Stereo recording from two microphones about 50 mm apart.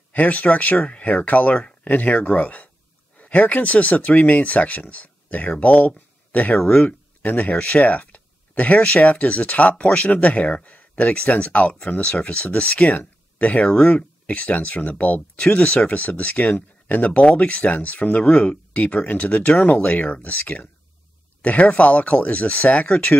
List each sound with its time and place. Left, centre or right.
0.1 s speech: left
6.6 s speech: centre
7.2 s speech: left